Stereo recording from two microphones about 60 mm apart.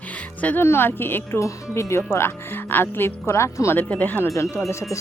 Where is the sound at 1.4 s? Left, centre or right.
Left.